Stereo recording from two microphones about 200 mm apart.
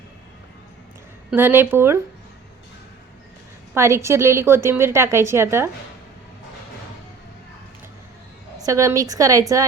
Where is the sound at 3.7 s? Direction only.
15° right (ahead or behind).